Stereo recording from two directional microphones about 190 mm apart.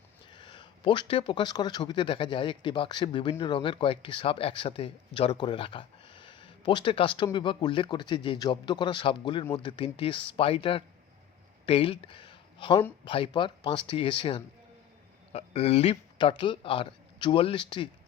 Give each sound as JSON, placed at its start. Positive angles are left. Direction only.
{"t": 0.3, "sound": "speech", "side_deg": 25}